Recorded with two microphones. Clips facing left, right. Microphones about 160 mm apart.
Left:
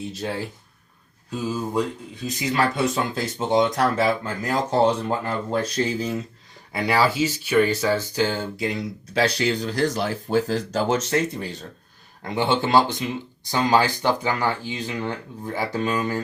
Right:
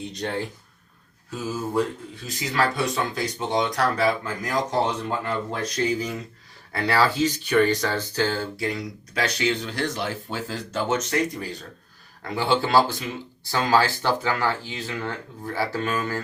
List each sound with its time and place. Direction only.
0.0 s speech: 5° left (ahead or behind)
1.3 s speech: 15° left (ahead or behind)
6.7 s speech: 10° left (ahead or behind); by 11.2 s 30° left (ahead or behind)
12.3 s speech: 20° left (ahead or behind)